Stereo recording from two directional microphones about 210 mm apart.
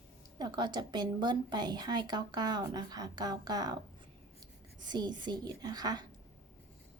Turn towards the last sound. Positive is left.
turn(degrees=-20)  # may be behind; listen again after turning